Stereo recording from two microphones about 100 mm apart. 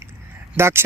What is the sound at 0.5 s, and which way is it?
Speech, 25° right (ahead or behind).